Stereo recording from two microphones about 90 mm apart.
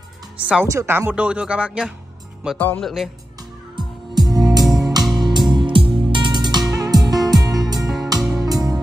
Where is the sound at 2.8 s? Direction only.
5° left (ahead or behind).